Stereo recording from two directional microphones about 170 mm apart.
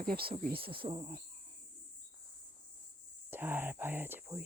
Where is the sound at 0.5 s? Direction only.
30° right (ahead or behind).